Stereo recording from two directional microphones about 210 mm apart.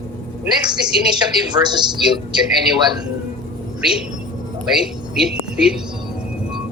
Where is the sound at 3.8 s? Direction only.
5° right (ahead or behind).